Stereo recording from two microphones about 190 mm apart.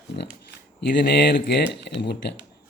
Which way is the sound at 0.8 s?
60° left (ahead or behind).